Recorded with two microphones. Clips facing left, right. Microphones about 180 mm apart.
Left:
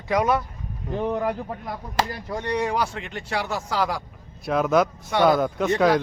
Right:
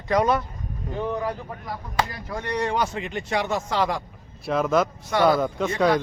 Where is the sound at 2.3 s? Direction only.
15° left (ahead or behind).